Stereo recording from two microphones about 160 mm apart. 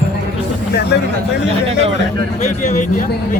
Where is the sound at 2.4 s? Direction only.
50° left (ahead or behind).